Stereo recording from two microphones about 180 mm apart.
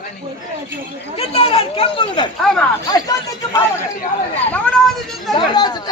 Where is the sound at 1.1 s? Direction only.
30° left (ahead or behind).